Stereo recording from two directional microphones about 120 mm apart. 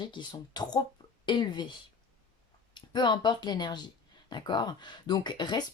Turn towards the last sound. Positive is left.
turn(degrees=35)  # may be behind; listen again after turning